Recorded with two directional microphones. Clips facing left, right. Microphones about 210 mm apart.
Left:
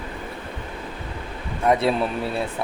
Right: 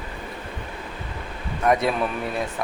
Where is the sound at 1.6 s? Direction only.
30° left (ahead or behind).